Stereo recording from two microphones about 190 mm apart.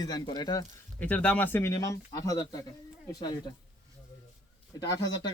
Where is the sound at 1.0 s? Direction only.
10° left (ahead or behind).